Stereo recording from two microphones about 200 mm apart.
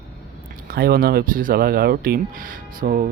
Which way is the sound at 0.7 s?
50° right (ahead or behind).